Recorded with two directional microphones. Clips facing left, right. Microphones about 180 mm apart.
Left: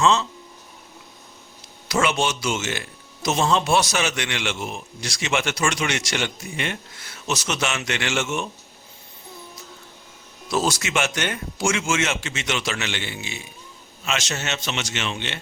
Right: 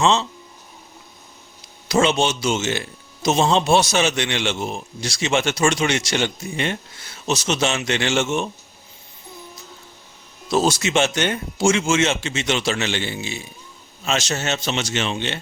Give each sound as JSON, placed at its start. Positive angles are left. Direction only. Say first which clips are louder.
{"t": 0.0, "sound": "a man's voice", "louder": "right 1 dB", "side_deg": -25}
{"t": 1.9, "sound": "a man's voice", "louder": "right 4 dB", "side_deg": -25}
{"t": 10.5, "sound": "a man's voice", "louder": "right 4 dB", "side_deg": -25}